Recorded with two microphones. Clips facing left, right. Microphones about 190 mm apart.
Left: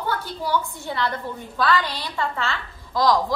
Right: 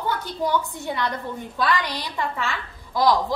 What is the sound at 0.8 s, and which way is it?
A woman's voice, 15° right (ahead or behind).